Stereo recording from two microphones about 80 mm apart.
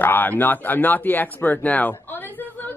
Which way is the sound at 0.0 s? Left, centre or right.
Left.